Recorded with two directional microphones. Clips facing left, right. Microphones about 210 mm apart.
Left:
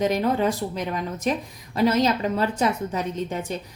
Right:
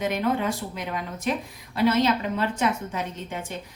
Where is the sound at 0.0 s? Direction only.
40° left (ahead or behind).